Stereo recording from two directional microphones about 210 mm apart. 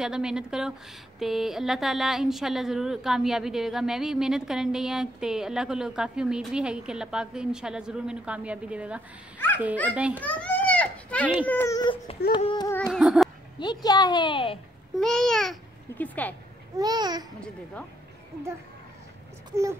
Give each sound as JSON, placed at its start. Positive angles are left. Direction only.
{"t": 0.0, "sound": "speech", "side_deg": -5}
{"t": 10.1, "sound": "children playing", "side_deg": 5}
{"t": 11.3, "sound": "a woman's voice", "side_deg": 10}
{"t": 12.6, "sound": "speech", "side_deg": 5}
{"t": 13.6, "sound": "a woman's voice", "side_deg": 20}
{"t": 15.0, "sound": "speech", "side_deg": 0}
{"t": 16.7, "sound": "babbling", "side_deg": -20}